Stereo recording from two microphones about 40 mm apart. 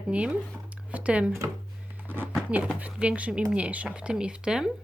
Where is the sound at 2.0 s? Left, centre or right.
Right.